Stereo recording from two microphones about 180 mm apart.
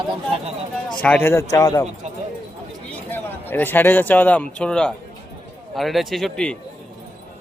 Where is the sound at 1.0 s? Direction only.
10° left (ahead or behind).